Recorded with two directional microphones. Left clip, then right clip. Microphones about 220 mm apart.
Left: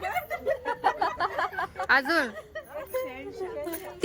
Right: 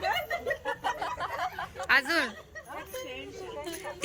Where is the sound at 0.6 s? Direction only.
40° left (ahead or behind).